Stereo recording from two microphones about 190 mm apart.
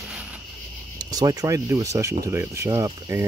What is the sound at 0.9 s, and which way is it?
Speech, 20° right (ahead or behind).